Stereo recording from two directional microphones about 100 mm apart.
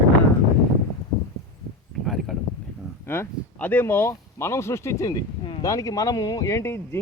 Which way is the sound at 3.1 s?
20° left (ahead or behind).